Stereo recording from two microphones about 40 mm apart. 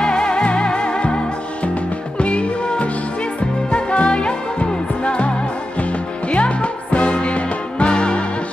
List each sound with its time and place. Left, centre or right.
0.0 s music: left